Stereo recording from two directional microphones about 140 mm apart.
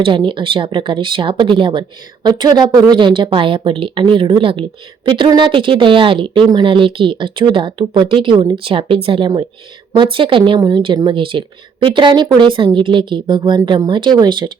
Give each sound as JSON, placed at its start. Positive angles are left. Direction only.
{"t": 0.0, "sound": "speech", "side_deg": -35}